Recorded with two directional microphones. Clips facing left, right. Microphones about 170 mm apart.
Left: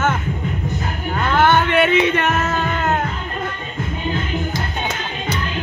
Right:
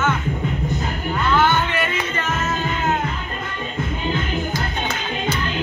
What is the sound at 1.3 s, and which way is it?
Music, 60° left (ahead or behind).